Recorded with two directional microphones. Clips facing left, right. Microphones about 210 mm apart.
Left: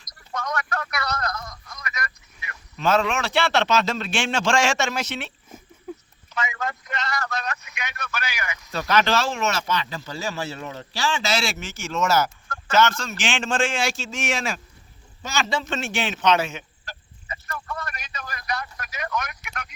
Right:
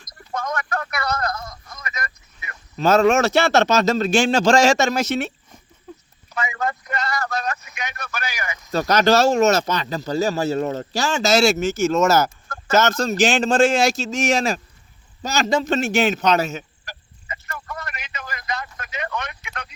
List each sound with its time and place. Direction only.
0.0 s speech: 50° right (ahead or behind)
1.3 s radio: 25° right (ahead or behind)
2.0 s speech: 35° right (ahead or behind)
5.9 s a sound: 10° left (ahead or behind)
6.4 s a sound: 35° right (ahead or behind)
6.7 s speech: 35° right (ahead or behind)
17.7 s telephone: 20° right (ahead or behind)